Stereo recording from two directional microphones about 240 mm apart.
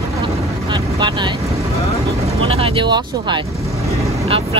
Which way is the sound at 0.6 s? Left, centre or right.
Centre.